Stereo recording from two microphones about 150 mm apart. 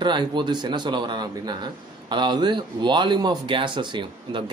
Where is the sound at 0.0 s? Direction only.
30° right (ahead or behind).